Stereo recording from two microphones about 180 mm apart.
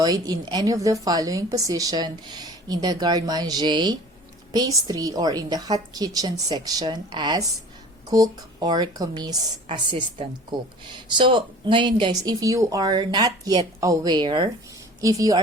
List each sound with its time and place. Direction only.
0.0 s speech: 20° right (ahead or behind)